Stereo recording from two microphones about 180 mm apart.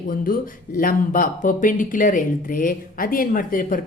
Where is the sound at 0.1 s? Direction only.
50° left (ahead or behind).